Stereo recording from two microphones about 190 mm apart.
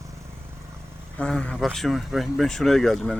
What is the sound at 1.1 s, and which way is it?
Speech, 5° left (ahead or behind).